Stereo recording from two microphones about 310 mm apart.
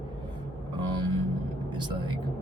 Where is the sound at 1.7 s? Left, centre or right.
Centre.